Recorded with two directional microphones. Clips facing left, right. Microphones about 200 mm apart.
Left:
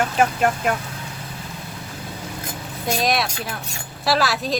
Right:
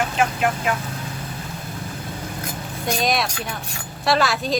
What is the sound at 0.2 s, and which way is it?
Speech, 45° left (ahead or behind).